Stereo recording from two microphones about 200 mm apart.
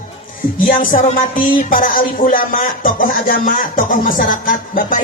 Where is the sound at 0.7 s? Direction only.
45° left (ahead or behind).